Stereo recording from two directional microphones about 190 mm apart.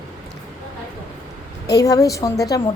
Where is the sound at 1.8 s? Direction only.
20° left (ahead or behind).